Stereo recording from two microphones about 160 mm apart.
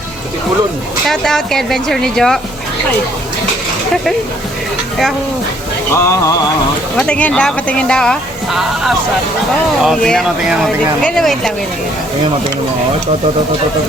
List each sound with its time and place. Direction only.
1.0 s speech: 5° left (ahead or behind)
5.9 s a sound: 15° left (ahead or behind)
6.9 s speech: 5° left (ahead or behind)